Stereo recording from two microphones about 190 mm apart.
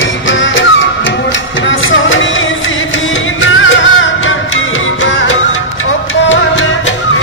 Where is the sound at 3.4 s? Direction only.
90° left.